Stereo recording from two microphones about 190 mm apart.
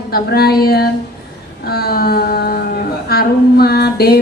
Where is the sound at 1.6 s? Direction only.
55° left (ahead or behind).